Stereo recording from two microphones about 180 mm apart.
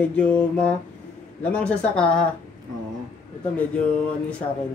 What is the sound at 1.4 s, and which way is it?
Speech, 5° left (ahead or behind).